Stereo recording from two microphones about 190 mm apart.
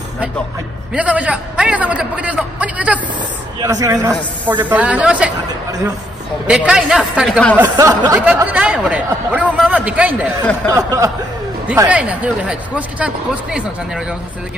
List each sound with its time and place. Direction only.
0.9 s speech: 5° right (ahead or behind)
3.6 s speech: 15° right (ahead or behind)
4.6 s speech: 5° right (ahead or behind)
6.4 s speech: 5° right (ahead or behind)
7.6 s speech: 15° right (ahead or behind)
10.7 s speech: 20° right (ahead or behind)